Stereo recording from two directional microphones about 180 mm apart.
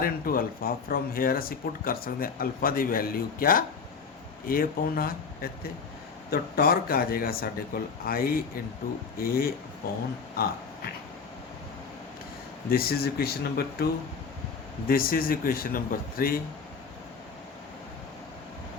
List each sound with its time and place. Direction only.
0.0 s a man's voice: 55° left (ahead or behind)
12.6 s a man's voice: 55° left (ahead or behind)
14.8 s speech: 55° left (ahead or behind)